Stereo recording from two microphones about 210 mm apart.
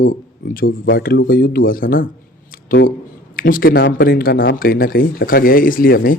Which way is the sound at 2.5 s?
45° left (ahead or behind).